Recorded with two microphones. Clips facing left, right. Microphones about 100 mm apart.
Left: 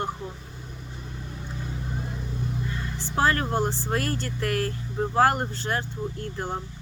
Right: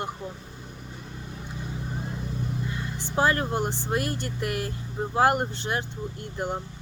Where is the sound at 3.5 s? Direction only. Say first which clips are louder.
Left 1 dB; 15° right (ahead or behind).